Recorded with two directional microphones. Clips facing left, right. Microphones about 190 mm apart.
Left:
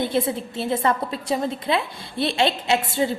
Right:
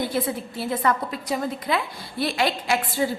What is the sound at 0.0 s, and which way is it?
A woman's voice, 25° left (ahead or behind).